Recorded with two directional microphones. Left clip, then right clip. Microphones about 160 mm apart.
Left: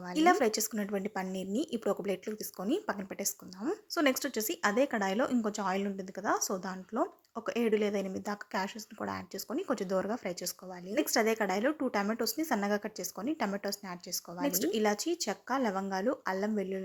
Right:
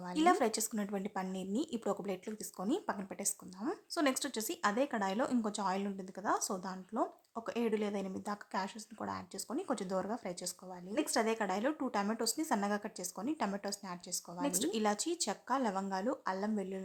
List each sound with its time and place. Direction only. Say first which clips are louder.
0.0 s speech: left 4 dB; 15° left (ahead or behind)